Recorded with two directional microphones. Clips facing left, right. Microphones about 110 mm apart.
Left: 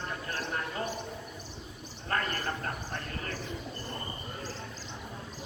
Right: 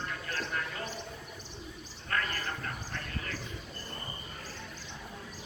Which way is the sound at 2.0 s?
35° left (ahead or behind).